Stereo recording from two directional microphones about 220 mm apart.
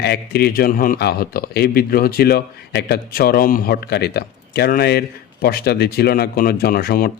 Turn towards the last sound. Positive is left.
turn(degrees=45)  # may be behind; listen again after turning